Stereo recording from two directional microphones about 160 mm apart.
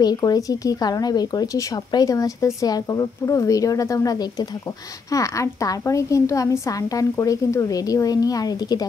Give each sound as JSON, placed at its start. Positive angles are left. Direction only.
{"t": 0.0, "sound": "speech", "side_deg": 25}